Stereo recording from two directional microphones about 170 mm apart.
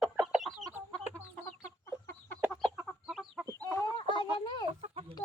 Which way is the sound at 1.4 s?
15° left (ahead or behind).